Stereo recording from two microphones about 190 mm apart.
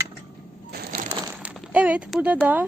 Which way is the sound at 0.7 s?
55° right (ahead or behind).